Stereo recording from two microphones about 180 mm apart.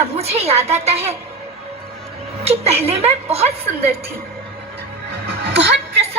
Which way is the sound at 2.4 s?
35° right (ahead or behind).